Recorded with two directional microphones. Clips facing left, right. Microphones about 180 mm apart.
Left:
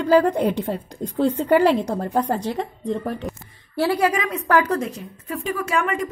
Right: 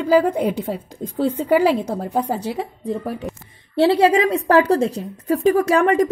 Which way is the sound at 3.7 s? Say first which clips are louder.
Right 6 dB; 25° right (ahead or behind).